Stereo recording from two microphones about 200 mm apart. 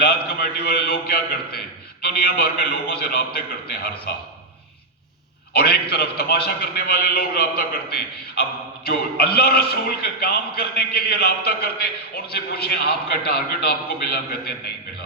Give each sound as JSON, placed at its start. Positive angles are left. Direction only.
{"t": 0.0, "sound": "a man's voice", "side_deg": 50}
{"t": 5.5, "sound": "a man's voice", "side_deg": 50}